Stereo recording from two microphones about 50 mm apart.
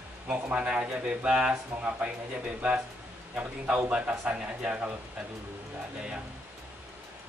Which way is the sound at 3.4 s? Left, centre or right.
Right.